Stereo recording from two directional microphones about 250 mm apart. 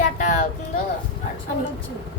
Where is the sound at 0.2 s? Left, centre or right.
Left.